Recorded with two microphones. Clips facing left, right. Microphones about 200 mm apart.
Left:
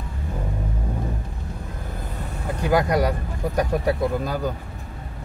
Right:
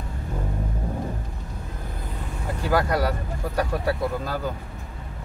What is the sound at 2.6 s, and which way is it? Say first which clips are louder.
Speech: left 3 dB; 15° left (ahead or behind).